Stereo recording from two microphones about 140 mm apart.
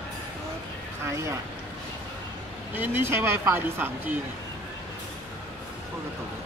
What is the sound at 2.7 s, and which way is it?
Speech, 15° right (ahead or behind).